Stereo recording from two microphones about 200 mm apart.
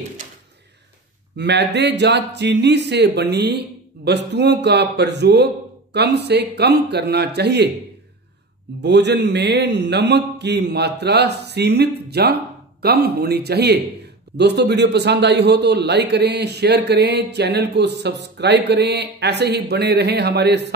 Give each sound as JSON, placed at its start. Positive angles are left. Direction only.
{"t": 1.3, "sound": "a man's voice", "side_deg": -60}
{"t": 8.8, "sound": "a man's voice", "side_deg": -60}